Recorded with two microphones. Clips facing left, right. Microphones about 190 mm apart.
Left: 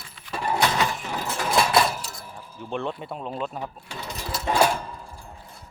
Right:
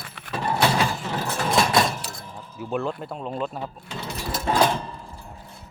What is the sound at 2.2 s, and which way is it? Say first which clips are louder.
Keys jangling: right 2 dB; 10° left (ahead or behind).